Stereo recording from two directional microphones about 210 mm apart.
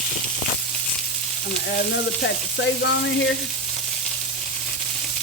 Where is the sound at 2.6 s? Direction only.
60° left (ahead or behind).